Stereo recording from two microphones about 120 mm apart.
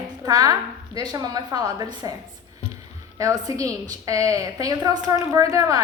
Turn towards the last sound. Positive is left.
turn(degrees=-30)  # may be behind; listen again after turning